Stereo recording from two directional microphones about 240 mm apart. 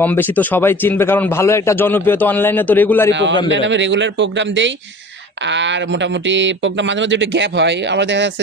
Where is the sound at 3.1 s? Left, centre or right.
Right.